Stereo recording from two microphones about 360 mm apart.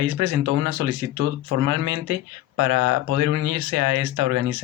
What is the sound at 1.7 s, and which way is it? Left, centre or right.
Speech, right.